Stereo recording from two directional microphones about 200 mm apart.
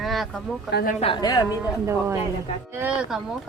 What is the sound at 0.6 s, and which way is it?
Speech, 55° left (ahead or behind).